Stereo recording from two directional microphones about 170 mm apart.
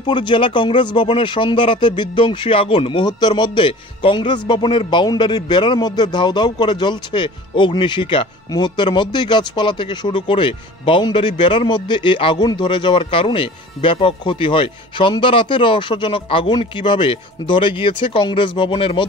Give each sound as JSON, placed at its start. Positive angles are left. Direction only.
{"t": 0.0, "sound": "speech", "side_deg": 25}